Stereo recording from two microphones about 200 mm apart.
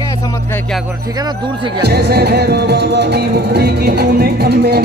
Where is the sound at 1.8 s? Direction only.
55° right (ahead or behind).